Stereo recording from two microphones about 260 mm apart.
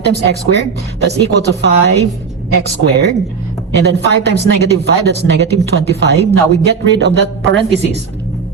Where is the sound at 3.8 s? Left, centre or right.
Right.